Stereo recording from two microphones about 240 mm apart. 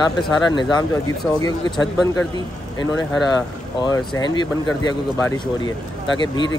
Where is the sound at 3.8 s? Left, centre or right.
Centre.